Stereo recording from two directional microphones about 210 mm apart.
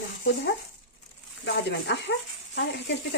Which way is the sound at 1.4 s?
60° left (ahead or behind).